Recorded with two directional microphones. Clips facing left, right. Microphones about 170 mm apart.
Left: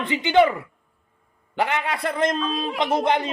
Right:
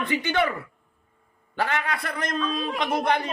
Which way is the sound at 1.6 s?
20° left (ahead or behind).